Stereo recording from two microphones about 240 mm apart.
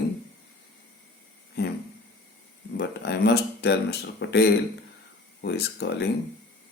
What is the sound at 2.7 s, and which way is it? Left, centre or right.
Speech, left.